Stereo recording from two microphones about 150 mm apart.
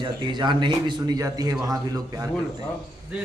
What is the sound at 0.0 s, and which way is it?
Speech, 30° right (ahead or behind).